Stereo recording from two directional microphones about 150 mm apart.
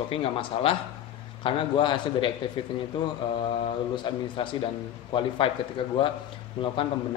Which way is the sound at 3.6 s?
35° left (ahead or behind).